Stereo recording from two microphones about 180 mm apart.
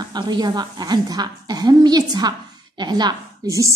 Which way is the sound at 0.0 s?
25° right (ahead or behind).